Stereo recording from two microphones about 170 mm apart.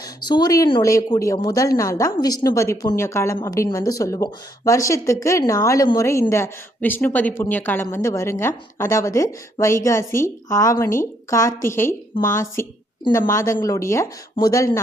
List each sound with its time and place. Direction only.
0.0 s a woman's voice: 25° left (ahead or behind)
13.3 s a woman's voice: 15° left (ahead or behind)